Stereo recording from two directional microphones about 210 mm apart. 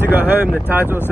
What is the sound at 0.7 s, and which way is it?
Speech, 10° right (ahead or behind).